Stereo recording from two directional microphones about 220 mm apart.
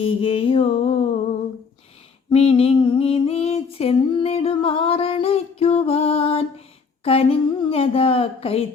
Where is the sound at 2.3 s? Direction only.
25° left (ahead or behind).